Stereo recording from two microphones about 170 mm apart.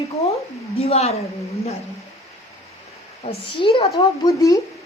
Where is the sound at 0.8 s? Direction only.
35° left (ahead or behind).